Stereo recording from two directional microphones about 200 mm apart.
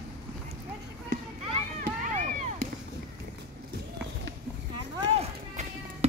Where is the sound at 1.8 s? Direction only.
40° right (ahead or behind).